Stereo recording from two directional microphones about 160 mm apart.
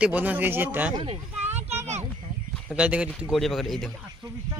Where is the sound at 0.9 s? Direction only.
35° right (ahead or behind).